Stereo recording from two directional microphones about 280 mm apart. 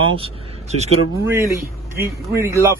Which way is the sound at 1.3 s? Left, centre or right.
Centre.